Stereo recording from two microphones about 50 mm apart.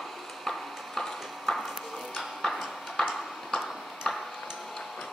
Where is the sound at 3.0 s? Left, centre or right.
Centre.